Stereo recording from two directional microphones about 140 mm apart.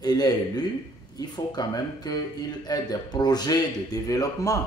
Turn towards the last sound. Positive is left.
turn(degrees=25)  # may be behind; listen again after turning